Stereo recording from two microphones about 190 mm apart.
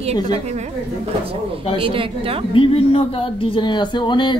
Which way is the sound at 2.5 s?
30° left (ahead or behind).